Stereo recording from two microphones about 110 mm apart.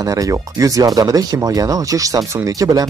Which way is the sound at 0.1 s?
30° right (ahead or behind).